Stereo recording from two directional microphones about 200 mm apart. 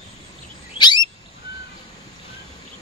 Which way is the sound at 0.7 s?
20° left (ahead or behind).